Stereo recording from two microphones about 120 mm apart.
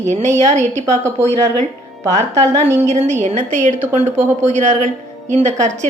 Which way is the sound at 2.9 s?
70° right (ahead or behind).